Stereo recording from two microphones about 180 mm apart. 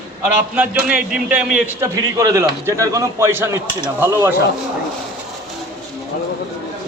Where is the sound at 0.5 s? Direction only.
5° right (ahead or behind).